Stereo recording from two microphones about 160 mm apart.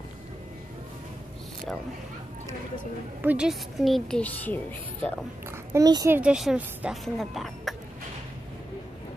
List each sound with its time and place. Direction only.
3.2 s a woman's voice: 10° right (ahead or behind); by 4.6 s 10° left (ahead or behind)
5.5 s a child's voice: 20° right (ahead or behind)
6.1 s a woman's voice: 5° right (ahead or behind)